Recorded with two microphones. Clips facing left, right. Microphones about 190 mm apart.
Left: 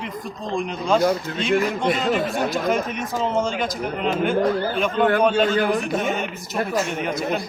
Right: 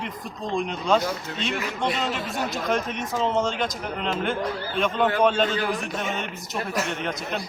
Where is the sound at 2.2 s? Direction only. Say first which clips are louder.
Left 6 dB; 55° left (ahead or behind).